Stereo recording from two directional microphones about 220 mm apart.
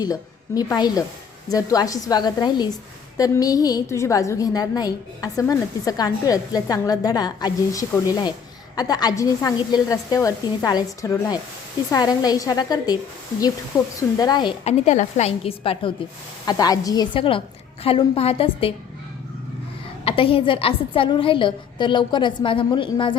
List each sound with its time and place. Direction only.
0.0 s a woman's voice: 15° left (ahead or behind)
14.2 s a woman's voice: 20° left (ahead or behind)
20.1 s a woman's voice: 25° left (ahead or behind)